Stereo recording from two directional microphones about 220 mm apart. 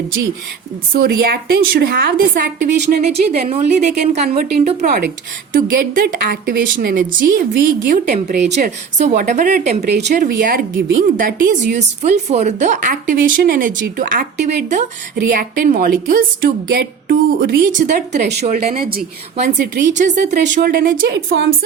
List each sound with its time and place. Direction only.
0.9 s a woman's voice: 45° right (ahead or behind)
3.3 s a woman's voice: 30° right (ahead or behind); by 21.5 s 45° right (ahead or behind)